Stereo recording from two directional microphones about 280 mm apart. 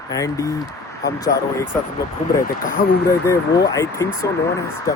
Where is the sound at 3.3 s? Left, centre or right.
Centre.